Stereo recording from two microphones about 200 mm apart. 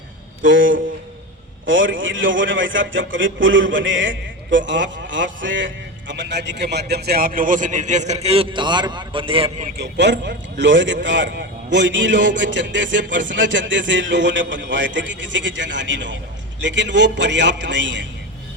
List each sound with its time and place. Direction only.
0.4 s a man's voice: 75° right (ahead or behind); by 9.6 s 25° right (ahead or behind)
9.7 s a man's voice: 60° right (ahead or behind)